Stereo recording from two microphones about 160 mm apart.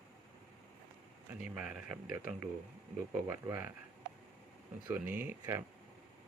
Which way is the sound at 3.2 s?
15° right (ahead or behind).